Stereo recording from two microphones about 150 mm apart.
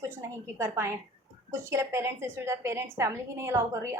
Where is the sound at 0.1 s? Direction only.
20° right (ahead or behind).